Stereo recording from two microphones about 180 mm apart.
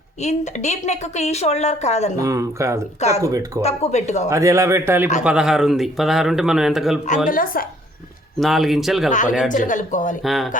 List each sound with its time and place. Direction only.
0.2 s a woman's voice: 40° left (ahead or behind)
2.2 s a man's voice: 20° right (ahead or behind)
3.6 s a woman's voice: 35° left (ahead or behind)
4.3 s a man's voice: 15° right (ahead or behind)
7.3 s speech: 50° left (ahead or behind)
8.4 s speech: centre (ahead or behind)
9.0 s speech: 45° left (ahead or behind)
10.2 s speech: centre (ahead or behind)